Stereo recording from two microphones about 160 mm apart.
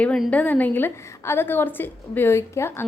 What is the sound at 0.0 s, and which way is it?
A woman's voice, 5° left (ahead or behind).